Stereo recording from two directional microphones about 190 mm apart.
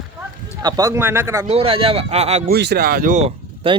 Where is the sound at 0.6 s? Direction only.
20° right (ahead or behind).